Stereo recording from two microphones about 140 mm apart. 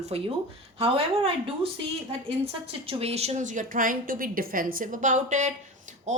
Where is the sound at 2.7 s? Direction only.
45° right (ahead or behind).